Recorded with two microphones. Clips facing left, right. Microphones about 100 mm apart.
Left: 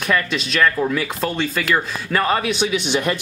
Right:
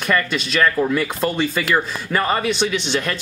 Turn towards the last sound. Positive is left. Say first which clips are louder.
# left 1 dB
turn(degrees=10)  # may be behind; listen again after turning